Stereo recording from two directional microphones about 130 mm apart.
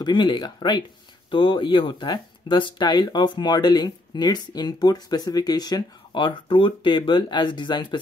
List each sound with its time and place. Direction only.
0.0 s speech: 35° left (ahead or behind)